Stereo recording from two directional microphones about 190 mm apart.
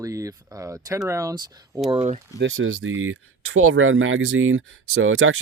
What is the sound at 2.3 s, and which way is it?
Speech, 80° right.